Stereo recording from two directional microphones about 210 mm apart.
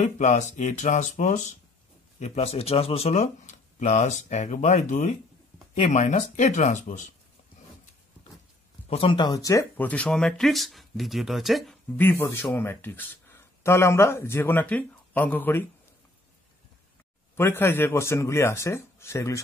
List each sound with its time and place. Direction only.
0.0 s speech: 35° left (ahead or behind)
8.8 s speech: 25° left (ahead or behind); by 15.6 s 10° left (ahead or behind)
17.4 s speech: 10° left (ahead or behind)